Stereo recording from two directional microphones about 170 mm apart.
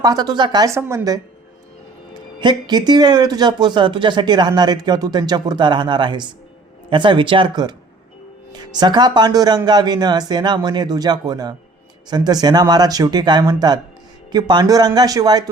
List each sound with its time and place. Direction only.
0.0 s speech: 25° right (ahead or behind)
2.4 s speech: 25° right (ahead or behind)